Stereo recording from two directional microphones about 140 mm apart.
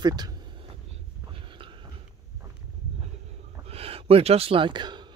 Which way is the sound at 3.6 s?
45° right (ahead or behind).